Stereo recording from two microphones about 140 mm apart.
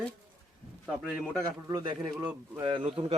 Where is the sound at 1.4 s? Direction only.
25° right (ahead or behind).